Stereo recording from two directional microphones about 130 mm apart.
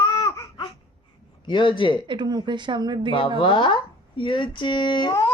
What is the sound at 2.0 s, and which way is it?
A woman's voice, 35° right (ahead or behind).